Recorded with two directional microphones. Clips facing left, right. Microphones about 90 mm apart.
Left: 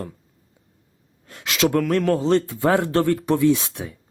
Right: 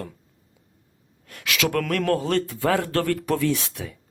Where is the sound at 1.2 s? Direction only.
25° left (ahead or behind).